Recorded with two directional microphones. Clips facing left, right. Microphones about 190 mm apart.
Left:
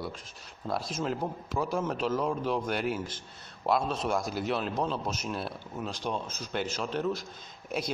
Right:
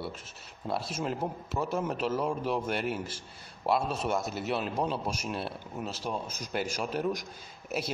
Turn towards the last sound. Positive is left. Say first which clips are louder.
# even
turn(degrees=-5)  # may be behind; listen again after turning